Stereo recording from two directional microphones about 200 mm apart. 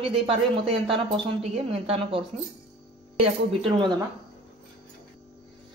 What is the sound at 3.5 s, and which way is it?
Speech, 25° right (ahead or behind).